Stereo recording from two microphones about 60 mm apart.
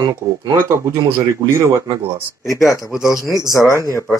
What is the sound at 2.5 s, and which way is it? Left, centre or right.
Speech, left.